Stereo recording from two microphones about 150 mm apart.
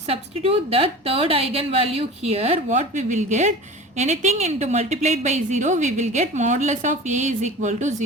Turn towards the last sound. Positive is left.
turn(degrees=-55)  # may be behind; listen again after turning